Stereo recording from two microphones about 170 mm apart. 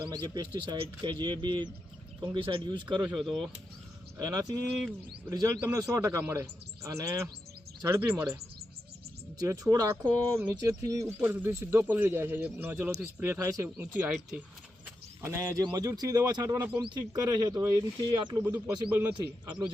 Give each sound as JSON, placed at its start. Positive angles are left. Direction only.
{"t": 0.0, "sound": "speech", "side_deg": -25}
{"t": 3.2, "sound": "speech", "side_deg": 0}
{"t": 4.2, "sound": "speech", "side_deg": -20}
{"t": 9.4, "sound": "speech", "side_deg": -20}
{"t": 15.2, "sound": "speech", "side_deg": -15}
{"t": 15.6, "sound": "speech", "side_deg": -25}
{"t": 19.1, "sound": "speech", "side_deg": -30}